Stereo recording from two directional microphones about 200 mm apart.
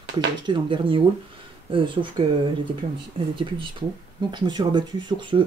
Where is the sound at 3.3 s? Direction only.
25° right (ahead or behind).